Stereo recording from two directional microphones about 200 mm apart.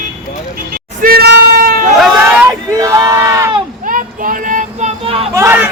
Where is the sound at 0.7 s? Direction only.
50° right (ahead or behind).